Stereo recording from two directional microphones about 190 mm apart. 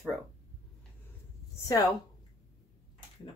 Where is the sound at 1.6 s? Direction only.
15° left (ahead or behind).